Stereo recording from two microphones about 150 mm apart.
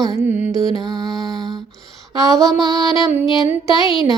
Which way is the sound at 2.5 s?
25° right (ahead or behind).